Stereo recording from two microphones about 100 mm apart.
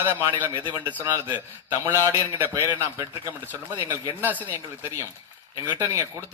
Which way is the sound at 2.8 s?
20° right (ahead or behind).